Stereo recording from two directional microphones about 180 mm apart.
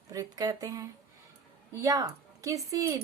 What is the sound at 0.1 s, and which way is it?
A woman's voice, 20° right (ahead or behind).